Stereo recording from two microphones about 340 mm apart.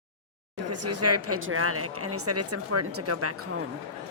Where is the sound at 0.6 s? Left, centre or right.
Right.